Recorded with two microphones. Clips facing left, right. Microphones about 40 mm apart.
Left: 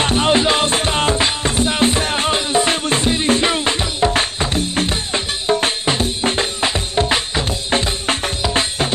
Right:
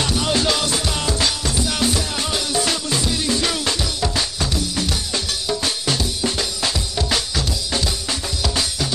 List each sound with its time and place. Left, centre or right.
0.0 s music: left